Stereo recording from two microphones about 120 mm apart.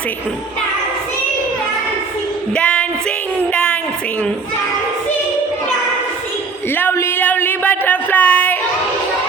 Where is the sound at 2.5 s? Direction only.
10° left (ahead or behind).